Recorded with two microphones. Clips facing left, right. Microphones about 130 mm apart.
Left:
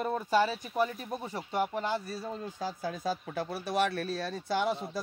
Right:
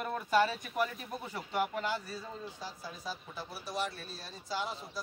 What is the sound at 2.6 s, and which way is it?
Speech, 50° left (ahead or behind).